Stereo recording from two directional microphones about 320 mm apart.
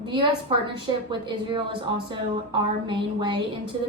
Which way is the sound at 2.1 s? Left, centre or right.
Centre.